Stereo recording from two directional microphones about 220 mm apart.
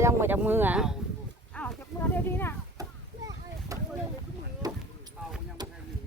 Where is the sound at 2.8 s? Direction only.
15° right (ahead or behind).